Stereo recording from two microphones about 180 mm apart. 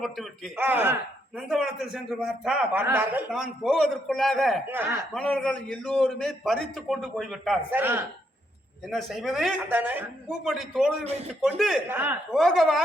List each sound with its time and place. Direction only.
0.0 s a man's voice: centre (ahead or behind)
0.6 s a man's voice: 10° right (ahead or behind)
4.7 s a man's voice: 10° right (ahead or behind)
5.1 s a man's voice: 5° left (ahead or behind)
7.8 s a man's voice: 10° right (ahead or behind)
8.9 s a man's voice: centre (ahead or behind)
11.9 s a man's voice: 10° right (ahead or behind)
12.3 s a man's voice: centre (ahead or behind)